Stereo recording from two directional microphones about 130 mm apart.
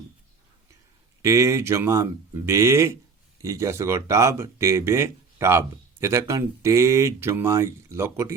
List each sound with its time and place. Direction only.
1.2 s speech: 20° right (ahead or behind)